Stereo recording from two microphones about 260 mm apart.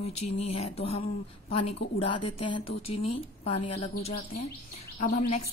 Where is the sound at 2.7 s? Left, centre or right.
Left.